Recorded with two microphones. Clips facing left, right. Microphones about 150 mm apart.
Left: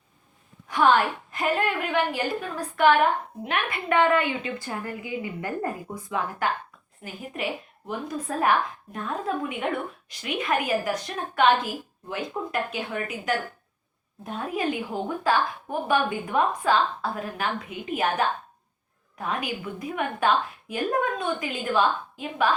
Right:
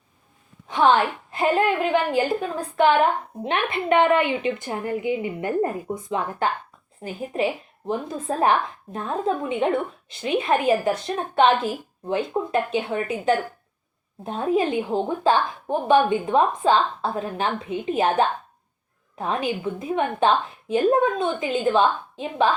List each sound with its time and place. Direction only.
0.8 s a woman's voice: 25° right (ahead or behind)